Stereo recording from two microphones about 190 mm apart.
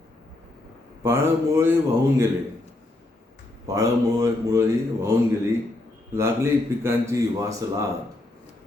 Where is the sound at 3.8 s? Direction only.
15° right (ahead or behind).